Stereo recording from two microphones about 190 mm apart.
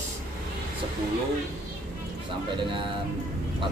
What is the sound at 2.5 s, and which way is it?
Speech, 25° right (ahead or behind).